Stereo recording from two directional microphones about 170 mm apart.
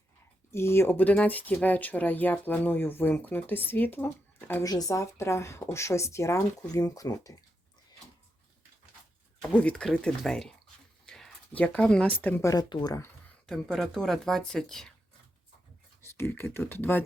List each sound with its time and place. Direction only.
0.5 s speech: 15° left (ahead or behind)
9.4 s speech: 5° left (ahead or behind)
13.5 s speech: 5° left (ahead or behind)
16.0 s speech: 15° left (ahead or behind)